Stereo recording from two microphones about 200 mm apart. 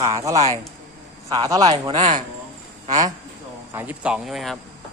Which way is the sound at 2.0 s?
35° right (ahead or behind).